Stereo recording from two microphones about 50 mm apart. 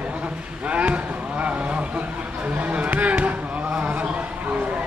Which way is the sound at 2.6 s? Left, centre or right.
Right.